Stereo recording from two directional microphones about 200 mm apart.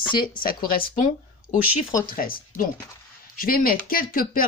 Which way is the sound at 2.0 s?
45° left (ahead or behind).